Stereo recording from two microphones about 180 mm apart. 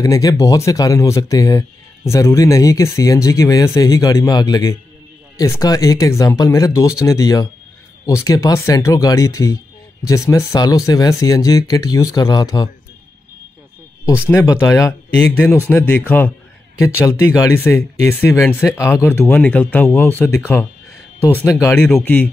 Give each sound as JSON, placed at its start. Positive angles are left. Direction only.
{"t": 0.0, "sound": "speech", "side_deg": 20}
{"t": 14.0, "sound": "speech", "side_deg": 15}